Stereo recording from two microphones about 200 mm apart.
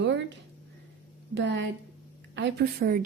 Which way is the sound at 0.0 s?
60° right (ahead or behind).